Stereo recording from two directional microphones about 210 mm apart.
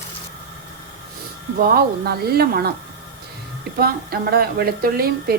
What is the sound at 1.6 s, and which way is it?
Frying, 45° right (ahead or behind).